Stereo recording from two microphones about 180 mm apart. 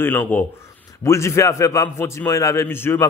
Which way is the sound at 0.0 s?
10° left (ahead or behind).